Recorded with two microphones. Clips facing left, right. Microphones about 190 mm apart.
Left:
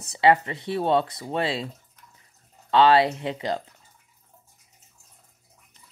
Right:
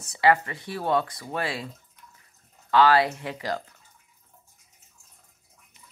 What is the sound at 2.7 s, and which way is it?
Speech, 25° left (ahead or behind).